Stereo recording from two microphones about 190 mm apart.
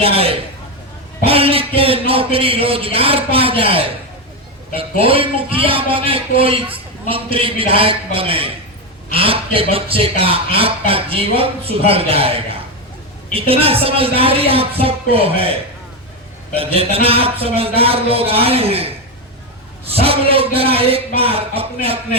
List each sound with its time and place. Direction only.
0.0 s a man's voice: 30° right (ahead or behind)
16.6 s a man's voice: 30° right (ahead or behind)